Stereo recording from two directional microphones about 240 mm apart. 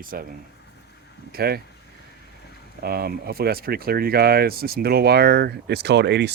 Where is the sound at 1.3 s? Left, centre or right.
Right.